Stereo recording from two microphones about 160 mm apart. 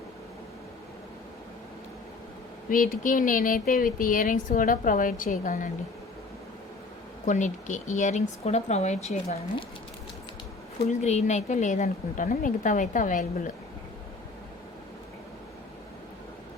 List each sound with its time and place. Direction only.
2.6 s speech: 60° left (ahead or behind)
7.3 s a woman's voice: 50° left (ahead or behind)
10.8 s a woman's voice: 45° left (ahead or behind)